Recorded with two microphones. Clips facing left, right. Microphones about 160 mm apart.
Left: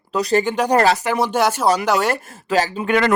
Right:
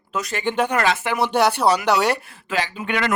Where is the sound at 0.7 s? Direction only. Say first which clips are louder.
Left 5 dB; 35° left (ahead or behind).